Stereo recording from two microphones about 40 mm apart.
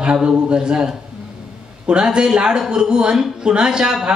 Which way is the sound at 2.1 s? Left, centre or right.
Centre.